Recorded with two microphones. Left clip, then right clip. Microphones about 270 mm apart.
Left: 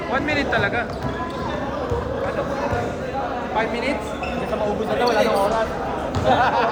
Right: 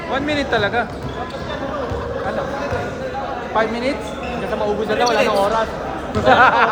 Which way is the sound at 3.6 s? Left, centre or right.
Centre.